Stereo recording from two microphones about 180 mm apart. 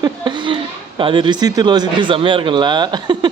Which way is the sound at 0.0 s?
25° right (ahead or behind).